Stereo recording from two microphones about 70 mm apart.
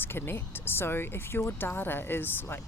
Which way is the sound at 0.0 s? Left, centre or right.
Left.